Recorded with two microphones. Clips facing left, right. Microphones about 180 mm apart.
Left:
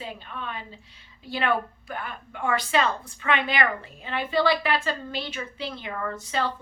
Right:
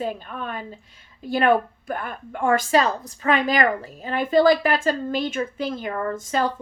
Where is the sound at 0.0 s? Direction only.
50° right (ahead or behind).